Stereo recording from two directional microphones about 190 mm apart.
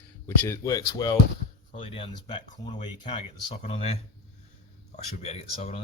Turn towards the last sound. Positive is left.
turn(degrees=35)  # may be behind; listen again after turning